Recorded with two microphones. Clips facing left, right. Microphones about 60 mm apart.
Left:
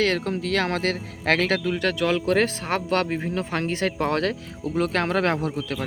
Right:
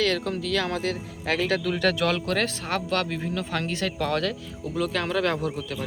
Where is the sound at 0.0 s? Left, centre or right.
Left.